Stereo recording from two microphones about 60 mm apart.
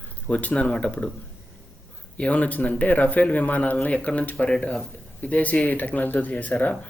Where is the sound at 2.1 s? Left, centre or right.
Left.